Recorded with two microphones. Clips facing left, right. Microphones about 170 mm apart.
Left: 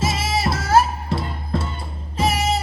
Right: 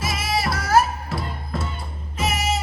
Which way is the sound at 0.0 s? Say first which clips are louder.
Left 3 dB; 25° left (ahead or behind).